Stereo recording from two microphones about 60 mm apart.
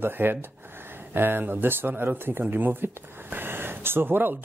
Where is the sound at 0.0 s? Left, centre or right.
Right.